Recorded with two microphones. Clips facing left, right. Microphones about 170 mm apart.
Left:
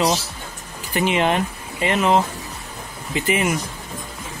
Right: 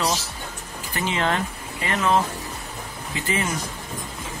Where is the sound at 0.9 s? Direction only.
20° left (ahead or behind).